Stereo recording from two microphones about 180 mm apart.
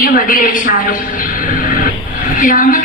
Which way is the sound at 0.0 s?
50° left (ahead or behind).